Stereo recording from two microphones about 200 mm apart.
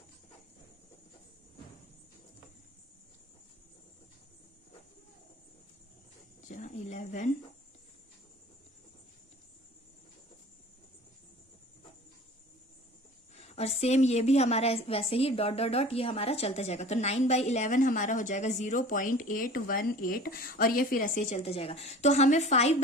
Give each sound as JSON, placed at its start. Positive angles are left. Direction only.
{"t": 6.5, "sound": "speech", "side_deg": 40}
{"t": 13.3, "sound": "a woman's voice", "side_deg": 30}